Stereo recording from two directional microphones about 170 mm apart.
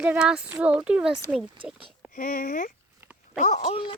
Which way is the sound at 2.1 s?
55° left (ahead or behind).